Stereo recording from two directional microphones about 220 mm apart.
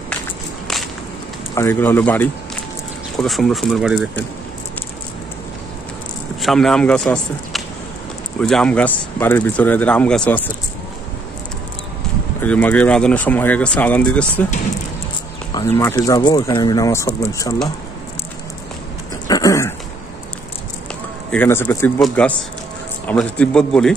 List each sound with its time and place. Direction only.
1.5 s speech: 10° left (ahead or behind)
6.4 s speech: centre (ahead or behind)
12.4 s speech: 5° left (ahead or behind)
15.5 s speech: 10° left (ahead or behind)
19.2 s a sound: 15° left (ahead or behind)
21.3 s speech: 10° left (ahead or behind)